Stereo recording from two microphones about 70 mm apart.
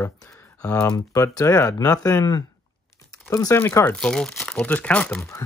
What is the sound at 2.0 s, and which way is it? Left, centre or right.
Speech, left.